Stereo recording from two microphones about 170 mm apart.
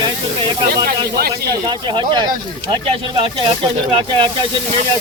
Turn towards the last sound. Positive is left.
turn(degrees=-30)  # may be behind; listen again after turning